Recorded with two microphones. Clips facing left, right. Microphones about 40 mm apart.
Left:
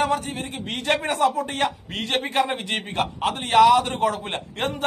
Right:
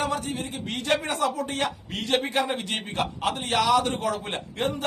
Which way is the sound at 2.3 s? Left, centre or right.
Left.